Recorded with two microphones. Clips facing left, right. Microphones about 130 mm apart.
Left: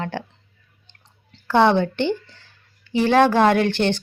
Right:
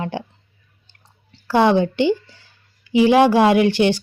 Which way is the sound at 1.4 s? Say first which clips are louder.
Right 1 dB; 10° right (ahead or behind).